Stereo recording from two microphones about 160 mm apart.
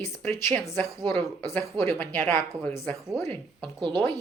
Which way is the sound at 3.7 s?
30° right (ahead or behind).